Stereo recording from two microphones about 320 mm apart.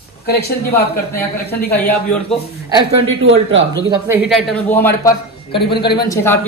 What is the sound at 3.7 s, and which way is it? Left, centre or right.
Speech, centre.